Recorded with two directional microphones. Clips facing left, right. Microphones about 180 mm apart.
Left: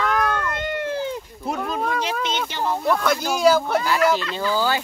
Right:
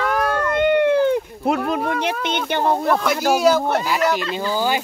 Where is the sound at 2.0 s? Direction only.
55° right (ahead or behind).